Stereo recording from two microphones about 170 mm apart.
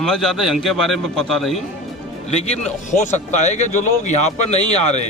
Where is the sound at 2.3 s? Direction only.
35° left (ahead or behind).